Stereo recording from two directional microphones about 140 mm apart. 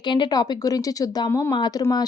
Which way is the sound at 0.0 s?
35° left (ahead or behind).